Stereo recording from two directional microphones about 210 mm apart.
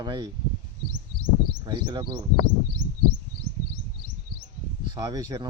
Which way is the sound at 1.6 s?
20° right (ahead or behind).